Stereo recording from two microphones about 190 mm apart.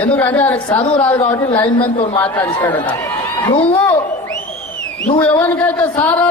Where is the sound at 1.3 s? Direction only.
15° left (ahead or behind).